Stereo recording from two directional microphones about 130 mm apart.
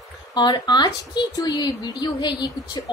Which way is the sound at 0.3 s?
35° left (ahead or behind).